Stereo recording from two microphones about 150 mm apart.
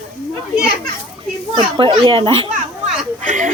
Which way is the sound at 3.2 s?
55° right (ahead or behind).